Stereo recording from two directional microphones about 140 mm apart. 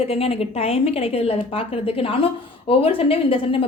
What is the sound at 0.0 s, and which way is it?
A woman's voice, 45° left (ahead or behind).